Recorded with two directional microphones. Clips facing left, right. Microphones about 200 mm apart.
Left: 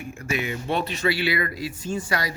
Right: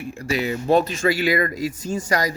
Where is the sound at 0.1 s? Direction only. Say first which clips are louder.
Right 4 dB; 35° right (ahead or behind).